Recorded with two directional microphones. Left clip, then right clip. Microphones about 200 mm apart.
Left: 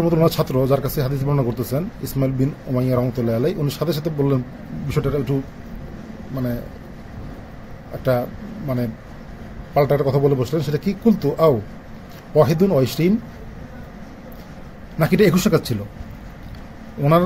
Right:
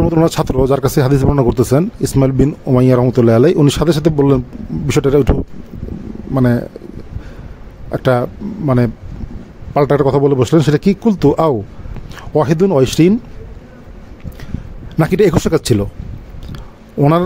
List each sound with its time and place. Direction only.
0.0 s speech: 55° right (ahead or behind)
6.3 s a man's voice: 50° right (ahead or behind)
8.0 s a man's voice: 55° right (ahead or behind)
15.0 s a man's voice: 55° right (ahead or behind)